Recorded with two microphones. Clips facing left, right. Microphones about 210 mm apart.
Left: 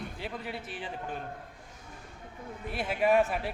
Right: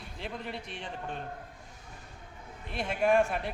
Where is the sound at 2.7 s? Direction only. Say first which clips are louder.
Even; 5° left (ahead or behind).